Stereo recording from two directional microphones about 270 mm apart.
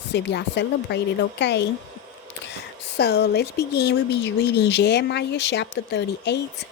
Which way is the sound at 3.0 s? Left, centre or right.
Left.